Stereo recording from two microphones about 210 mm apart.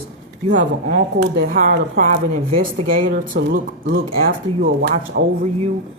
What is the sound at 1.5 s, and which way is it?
Speech, 40° right (ahead or behind).